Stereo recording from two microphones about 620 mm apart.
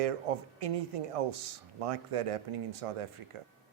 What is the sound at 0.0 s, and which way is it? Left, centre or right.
Speech, right.